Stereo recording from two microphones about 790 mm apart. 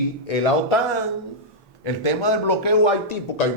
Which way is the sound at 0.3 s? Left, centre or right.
Left.